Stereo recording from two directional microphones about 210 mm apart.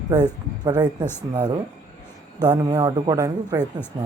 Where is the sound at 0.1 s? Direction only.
20° right (ahead or behind).